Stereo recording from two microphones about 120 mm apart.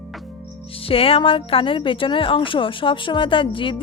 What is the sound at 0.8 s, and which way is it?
Speech, 50° left (ahead or behind).